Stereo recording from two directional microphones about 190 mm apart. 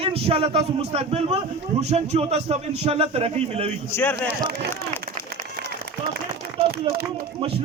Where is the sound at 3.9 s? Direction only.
10° left (ahead or behind).